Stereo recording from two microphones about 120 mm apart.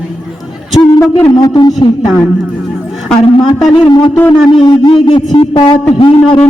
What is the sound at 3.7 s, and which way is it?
A man's voice, 40° left (ahead or behind).